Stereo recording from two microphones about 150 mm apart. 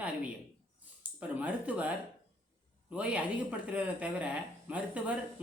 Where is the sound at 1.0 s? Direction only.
10° right (ahead or behind).